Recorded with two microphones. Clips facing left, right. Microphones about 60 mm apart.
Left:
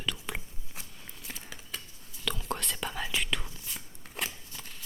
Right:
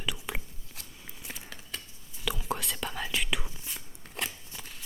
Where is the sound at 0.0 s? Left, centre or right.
Centre.